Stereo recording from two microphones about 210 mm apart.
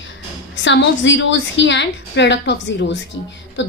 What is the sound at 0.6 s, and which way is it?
A woman's voice, 60° left (ahead or behind).